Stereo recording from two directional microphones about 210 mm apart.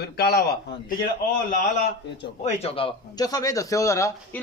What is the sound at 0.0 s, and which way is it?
Speech, 50° left (ahead or behind).